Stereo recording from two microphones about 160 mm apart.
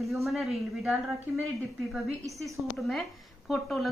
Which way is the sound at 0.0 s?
Centre (ahead or behind).